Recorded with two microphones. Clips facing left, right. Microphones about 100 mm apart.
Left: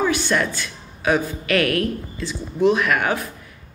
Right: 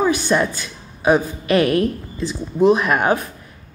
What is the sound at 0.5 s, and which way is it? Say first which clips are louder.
Speech: left 1 dB; 20° right (ahead or behind).